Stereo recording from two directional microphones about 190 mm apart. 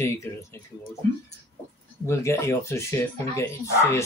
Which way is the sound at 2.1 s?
15° left (ahead or behind).